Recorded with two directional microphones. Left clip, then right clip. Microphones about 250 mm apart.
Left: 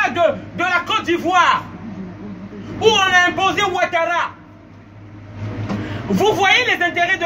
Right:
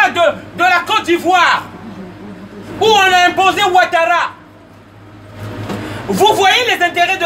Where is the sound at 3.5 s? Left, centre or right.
Right.